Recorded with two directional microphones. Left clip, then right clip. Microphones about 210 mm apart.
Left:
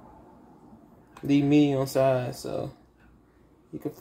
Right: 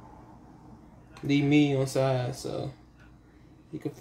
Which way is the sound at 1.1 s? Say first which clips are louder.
Left 2 dB; 20° left (ahead or behind).